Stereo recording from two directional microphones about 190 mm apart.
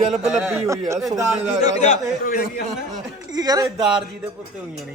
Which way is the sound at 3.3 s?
20° right (ahead or behind).